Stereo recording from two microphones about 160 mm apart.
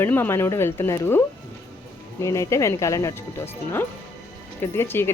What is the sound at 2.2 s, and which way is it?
Speech, 20° left (ahead or behind).